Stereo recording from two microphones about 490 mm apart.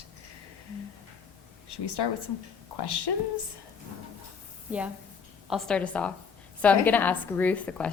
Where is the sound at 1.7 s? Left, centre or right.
Left.